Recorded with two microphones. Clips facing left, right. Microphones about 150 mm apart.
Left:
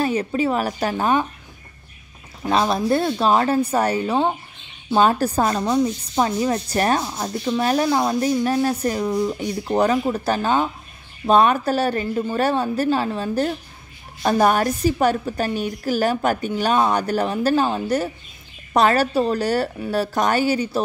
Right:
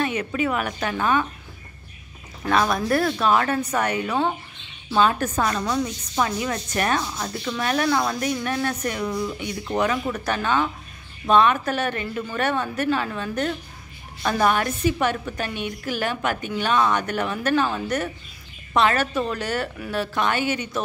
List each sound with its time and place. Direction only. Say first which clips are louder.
0.0 s a woman's voice: left 4 dB; 30° left (ahead or behind)
2.5 s a woman's voice: left 2 dB; 25° left (ahead or behind)